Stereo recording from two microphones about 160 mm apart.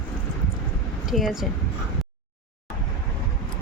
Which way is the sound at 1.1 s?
Centre (ahead or behind).